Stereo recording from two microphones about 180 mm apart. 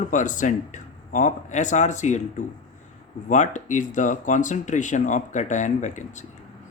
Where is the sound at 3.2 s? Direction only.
45° left (ahead or behind).